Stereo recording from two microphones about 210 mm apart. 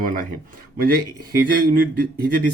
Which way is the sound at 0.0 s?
40° right (ahead or behind).